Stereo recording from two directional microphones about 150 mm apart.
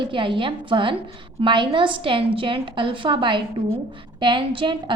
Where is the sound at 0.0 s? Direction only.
35° right (ahead or behind).